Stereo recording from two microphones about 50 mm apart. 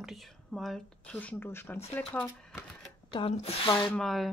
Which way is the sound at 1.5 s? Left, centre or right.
Left.